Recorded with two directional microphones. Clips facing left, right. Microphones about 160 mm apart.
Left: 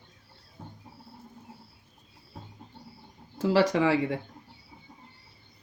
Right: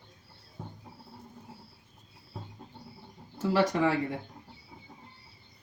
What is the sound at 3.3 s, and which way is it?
Speech, 90° left.